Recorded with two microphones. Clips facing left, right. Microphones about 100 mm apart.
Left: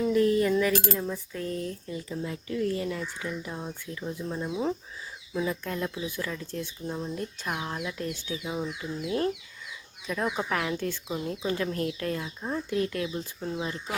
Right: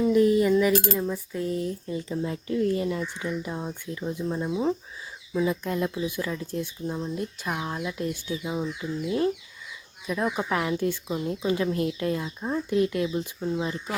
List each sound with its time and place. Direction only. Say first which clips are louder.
0.0 s a sound: right 3 dB; 15° right (ahead or behind)
0.5 s speech: right 4 dB; 10° right (ahead or behind)
1.9 s speech: right 4 dB; 30° right (ahead or behind)
10.3 s speech: right 3 dB; 15° right (ahead or behind)
13.4 s speech: right 4 dB; 5° right (ahead or behind)